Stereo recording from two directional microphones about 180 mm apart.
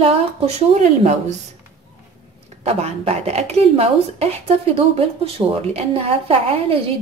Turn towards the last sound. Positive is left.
turn(degrees=-30)  # may be behind; listen again after turning